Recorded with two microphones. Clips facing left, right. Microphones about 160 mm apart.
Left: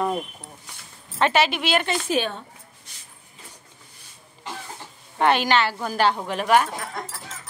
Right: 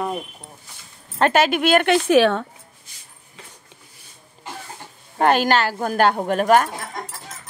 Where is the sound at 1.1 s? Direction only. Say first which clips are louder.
Right 3 dB; 45° right (ahead or behind).